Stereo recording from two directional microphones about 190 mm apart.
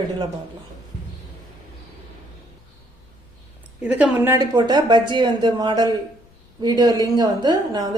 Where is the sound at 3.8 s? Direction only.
5° right (ahead or behind).